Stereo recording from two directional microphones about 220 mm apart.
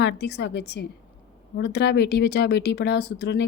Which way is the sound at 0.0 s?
50° left (ahead or behind).